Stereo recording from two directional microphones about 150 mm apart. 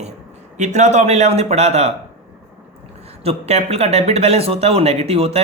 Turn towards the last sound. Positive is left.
turn(degrees=-40)  # may be behind; listen again after turning